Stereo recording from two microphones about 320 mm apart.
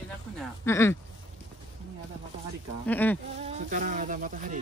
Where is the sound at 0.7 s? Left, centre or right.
Centre.